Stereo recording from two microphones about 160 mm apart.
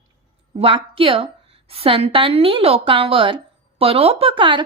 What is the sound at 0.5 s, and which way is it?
A woman's voice, 35° right (ahead or behind).